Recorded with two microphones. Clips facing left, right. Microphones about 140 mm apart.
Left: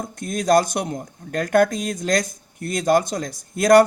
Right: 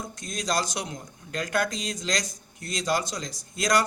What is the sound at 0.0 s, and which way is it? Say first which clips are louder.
Speech: left 9 dB; 55° left (ahead or behind).